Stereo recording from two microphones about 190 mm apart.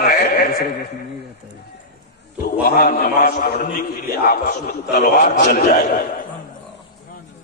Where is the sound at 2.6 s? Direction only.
50° left (ahead or behind).